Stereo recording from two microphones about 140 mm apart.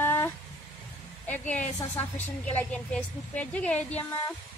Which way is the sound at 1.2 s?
10° left (ahead or behind).